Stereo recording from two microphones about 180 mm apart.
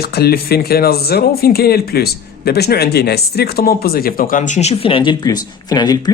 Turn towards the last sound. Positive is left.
turn(degrees=20)  # may be behind; listen again after turning